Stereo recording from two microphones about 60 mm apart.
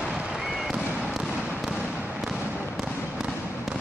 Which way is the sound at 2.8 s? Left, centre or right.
Centre.